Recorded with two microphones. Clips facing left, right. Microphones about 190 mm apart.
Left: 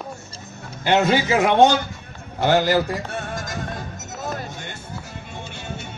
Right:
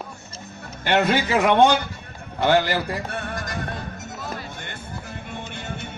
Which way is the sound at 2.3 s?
60° right (ahead or behind).